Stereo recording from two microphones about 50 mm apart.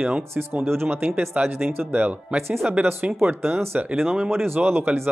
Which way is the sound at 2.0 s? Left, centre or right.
Right.